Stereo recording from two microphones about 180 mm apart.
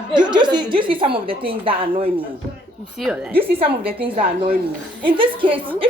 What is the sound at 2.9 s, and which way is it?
Speech, 5° right (ahead or behind).